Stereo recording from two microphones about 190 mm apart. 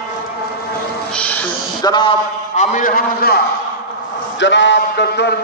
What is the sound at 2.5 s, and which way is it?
Speech, 40° left (ahead or behind).